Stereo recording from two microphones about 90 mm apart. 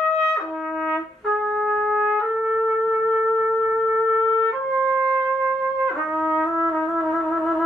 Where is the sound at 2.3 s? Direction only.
15° right (ahead or behind).